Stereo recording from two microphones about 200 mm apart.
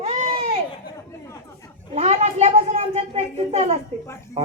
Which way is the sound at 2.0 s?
30° right (ahead or behind).